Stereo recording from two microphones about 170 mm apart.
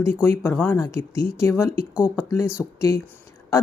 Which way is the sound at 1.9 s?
5° right (ahead or behind).